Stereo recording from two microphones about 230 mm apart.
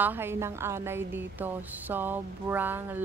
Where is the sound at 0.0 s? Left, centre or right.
Centre.